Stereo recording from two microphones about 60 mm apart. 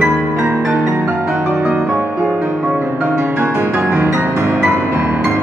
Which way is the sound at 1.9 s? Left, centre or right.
Right.